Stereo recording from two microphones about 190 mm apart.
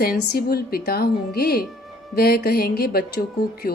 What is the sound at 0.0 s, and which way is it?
A woman's voice, 50° left (ahead or behind).